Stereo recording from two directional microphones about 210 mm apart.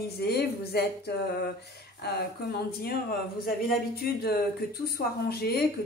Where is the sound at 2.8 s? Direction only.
45° left (ahead or behind).